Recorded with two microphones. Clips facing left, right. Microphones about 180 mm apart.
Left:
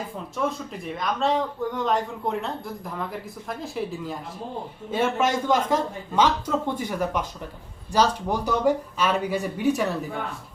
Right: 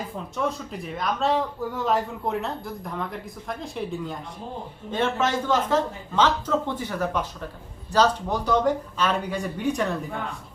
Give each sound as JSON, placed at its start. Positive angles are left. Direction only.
{"t": 0.3, "sound": "speech", "side_deg": 0}